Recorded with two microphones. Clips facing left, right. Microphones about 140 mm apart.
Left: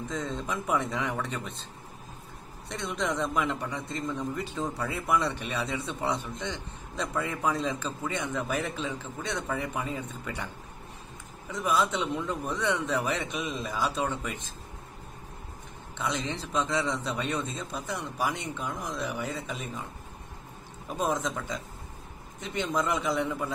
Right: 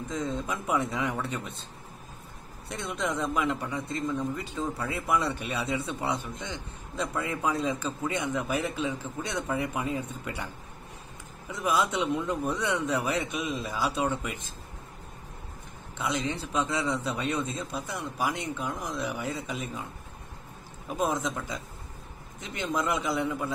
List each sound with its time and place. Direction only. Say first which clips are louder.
0.1 s speech: right 2 dB; 10° right (ahead or behind)
2.7 s speech: even; 5° right (ahead or behind)
11.6 s speech: right 1 dB; 10° right (ahead or behind)
16.0 s speech: right 2 dB; 5° right (ahead or behind)
21.0 s a man's voice: even; 5° right (ahead or behind)
22.6 s a man's voice: left 1 dB; 5° right (ahead or behind)